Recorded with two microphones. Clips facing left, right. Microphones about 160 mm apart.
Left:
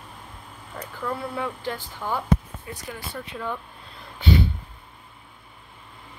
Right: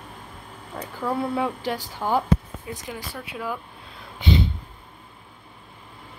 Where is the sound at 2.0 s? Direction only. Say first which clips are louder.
Right 5 dB; 30° right (ahead or behind).